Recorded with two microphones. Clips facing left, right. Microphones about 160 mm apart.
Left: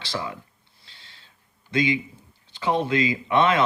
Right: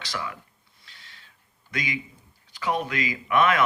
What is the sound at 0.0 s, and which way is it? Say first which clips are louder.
Speech: left 3 dB; 30° left (ahead or behind).